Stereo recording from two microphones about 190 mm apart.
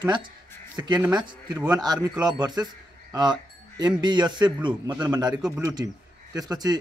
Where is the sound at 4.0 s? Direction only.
20° right (ahead or behind).